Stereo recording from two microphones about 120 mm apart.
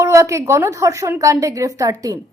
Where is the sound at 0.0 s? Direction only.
25° right (ahead or behind).